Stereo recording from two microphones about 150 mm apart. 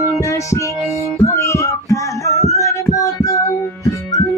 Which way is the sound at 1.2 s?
20° left (ahead or behind).